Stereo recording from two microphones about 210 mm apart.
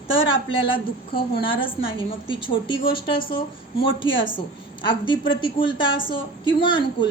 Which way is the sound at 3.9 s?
65° left (ahead or behind).